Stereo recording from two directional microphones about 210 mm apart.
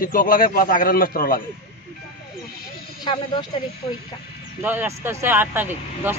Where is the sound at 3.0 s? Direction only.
20° left (ahead or behind).